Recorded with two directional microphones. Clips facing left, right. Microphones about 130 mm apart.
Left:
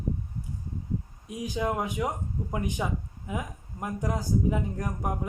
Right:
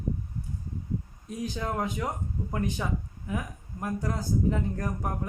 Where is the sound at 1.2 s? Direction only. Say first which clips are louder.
Left 4 dB; 10° left (ahead or behind).